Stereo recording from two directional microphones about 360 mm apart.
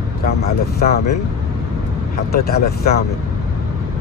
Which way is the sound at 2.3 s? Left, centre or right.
Left.